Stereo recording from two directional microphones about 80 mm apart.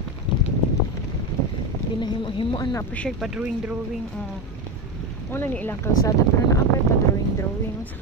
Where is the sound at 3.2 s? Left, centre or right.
Centre.